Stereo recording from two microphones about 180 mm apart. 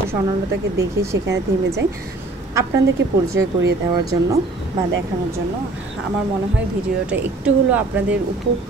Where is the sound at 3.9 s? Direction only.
20° right (ahead or behind).